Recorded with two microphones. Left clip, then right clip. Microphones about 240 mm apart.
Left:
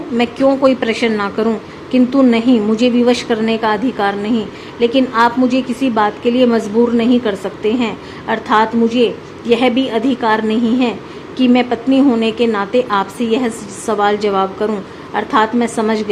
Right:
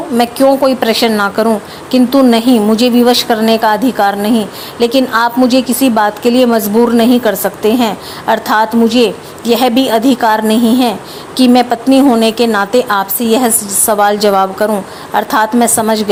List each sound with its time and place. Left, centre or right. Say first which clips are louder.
0.2 s a woman's voice: right 4 dB; centre